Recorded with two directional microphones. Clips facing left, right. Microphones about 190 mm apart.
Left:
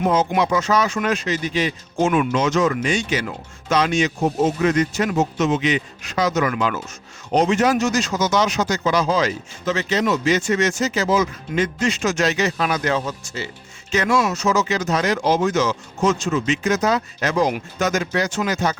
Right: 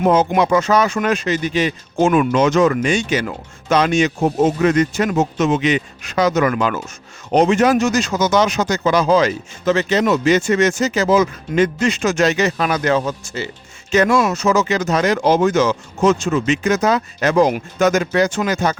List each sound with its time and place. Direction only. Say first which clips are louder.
0.0 s speech: right 4 dB; 55° right (ahead or behind)